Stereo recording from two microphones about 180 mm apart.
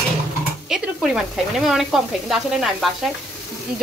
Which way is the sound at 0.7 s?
5° right (ahead or behind).